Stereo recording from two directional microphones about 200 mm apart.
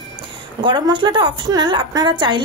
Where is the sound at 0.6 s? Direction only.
20° right (ahead or behind).